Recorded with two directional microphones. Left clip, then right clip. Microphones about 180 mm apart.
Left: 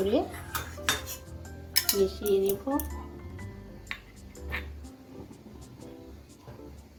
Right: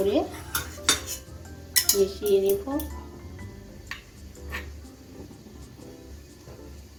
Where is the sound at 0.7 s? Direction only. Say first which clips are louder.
Right 5 dB; centre (ahead or behind).